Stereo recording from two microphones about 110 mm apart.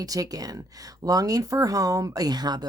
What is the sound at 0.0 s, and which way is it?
Speech, 35° right (ahead or behind).